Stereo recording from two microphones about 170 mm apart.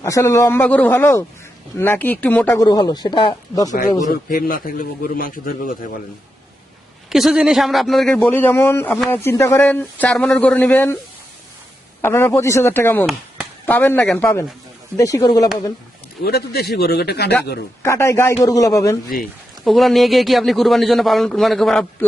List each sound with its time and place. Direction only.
0.0 s speech: 15° left (ahead or behind)
2.6 s speech: 25° left (ahead or behind)
4.1 s a man's voice: 60° left (ahead or behind)
7.1 s a man's voice: 5° right (ahead or behind)
12.0 s speech: 15° left (ahead or behind)
16.2 s a man's voice: 65° left (ahead or behind)
17.8 s speech: 15° left (ahead or behind)
19.6 s a man's voice: centre (ahead or behind)